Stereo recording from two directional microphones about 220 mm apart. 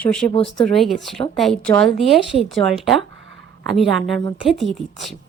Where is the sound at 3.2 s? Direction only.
55° right (ahead or behind).